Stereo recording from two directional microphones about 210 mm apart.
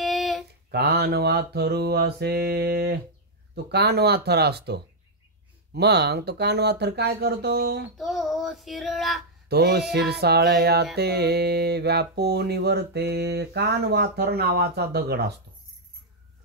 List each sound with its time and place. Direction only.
0.0 s a sound: centre (ahead or behind)
0.7 s mantra: 50° right (ahead or behind)
8.0 s child singing: centre (ahead or behind)
9.5 s mantra: 50° right (ahead or behind)